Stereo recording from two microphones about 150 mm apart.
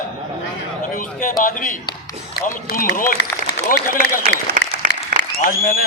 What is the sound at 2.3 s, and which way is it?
A man's voice, 75° left (ahead or behind).